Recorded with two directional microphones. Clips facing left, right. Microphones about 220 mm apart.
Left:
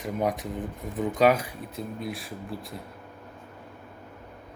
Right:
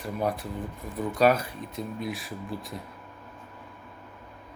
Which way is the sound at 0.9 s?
15° left (ahead or behind).